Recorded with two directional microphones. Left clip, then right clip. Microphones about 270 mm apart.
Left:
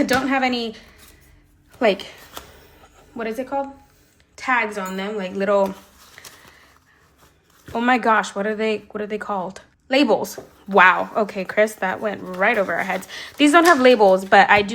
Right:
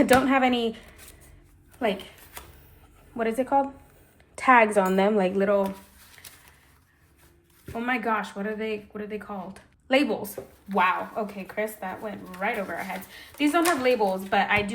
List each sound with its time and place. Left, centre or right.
0.0 s speech: centre
1.8 s speech: centre
3.2 s a woman's voice: centre
6.2 s a sound: centre
7.6 s speech: centre
10.7 s speech: left